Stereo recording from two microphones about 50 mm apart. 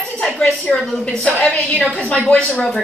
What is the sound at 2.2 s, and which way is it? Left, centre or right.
Speech, centre.